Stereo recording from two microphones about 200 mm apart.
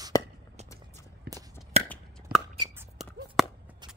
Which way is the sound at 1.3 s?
50° right (ahead or behind).